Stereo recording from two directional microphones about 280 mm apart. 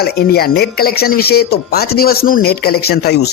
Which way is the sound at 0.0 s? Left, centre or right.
Left.